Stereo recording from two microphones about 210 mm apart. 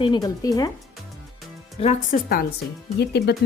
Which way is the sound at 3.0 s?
50° left (ahead or behind).